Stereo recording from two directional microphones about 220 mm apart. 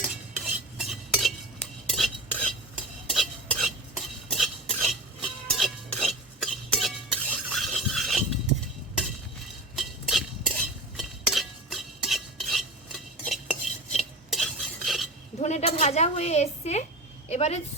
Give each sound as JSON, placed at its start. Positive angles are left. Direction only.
{"t": 0.0, "sound": "cutlery", "side_deg": 0}
{"t": 1.9, "sound": "stir", "side_deg": 0}
{"t": 9.7, "sound": "chink", "side_deg": 0}
{"t": 15.4, "sound": "a sound", "side_deg": 30}